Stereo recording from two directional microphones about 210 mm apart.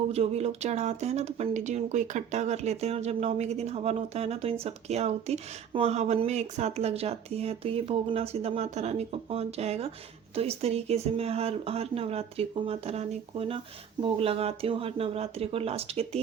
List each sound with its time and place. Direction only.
0.1 s speech: 30° right (ahead or behind)